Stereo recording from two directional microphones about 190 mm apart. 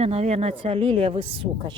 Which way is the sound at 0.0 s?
35° right (ahead or behind).